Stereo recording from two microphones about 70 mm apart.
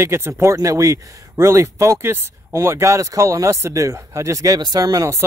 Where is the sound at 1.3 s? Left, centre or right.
Right.